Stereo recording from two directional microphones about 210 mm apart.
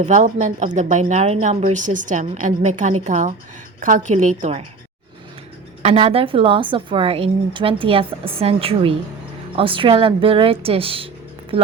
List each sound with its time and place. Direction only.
0.0 s a woman's voice: 35° right (ahead or behind)
5.8 s a woman's voice: 30° right (ahead or behind)